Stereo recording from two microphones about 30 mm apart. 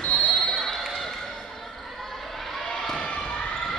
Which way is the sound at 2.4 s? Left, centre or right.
Centre.